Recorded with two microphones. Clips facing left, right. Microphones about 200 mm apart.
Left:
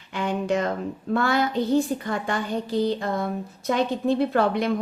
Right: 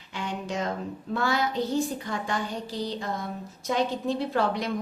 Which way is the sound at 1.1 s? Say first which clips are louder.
Left 4 dB; 55° left (ahead or behind).